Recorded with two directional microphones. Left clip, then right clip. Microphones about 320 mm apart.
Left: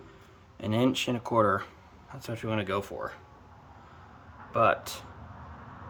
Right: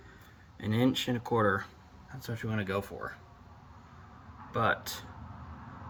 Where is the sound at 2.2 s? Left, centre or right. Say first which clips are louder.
Left 5 dB; centre.